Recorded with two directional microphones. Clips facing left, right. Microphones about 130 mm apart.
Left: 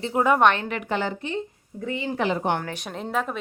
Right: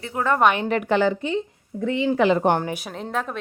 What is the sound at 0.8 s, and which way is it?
A woman's voice, 90° right.